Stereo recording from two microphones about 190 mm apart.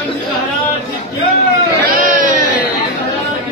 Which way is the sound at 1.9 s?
45° right (ahead or behind).